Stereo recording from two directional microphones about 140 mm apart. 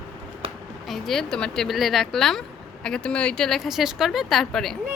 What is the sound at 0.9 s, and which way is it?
Speech, centre (ahead or behind).